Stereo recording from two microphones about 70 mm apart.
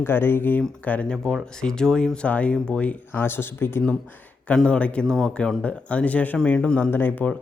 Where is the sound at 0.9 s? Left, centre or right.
Centre.